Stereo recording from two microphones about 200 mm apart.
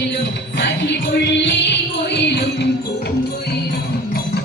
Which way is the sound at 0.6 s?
60° left (ahead or behind).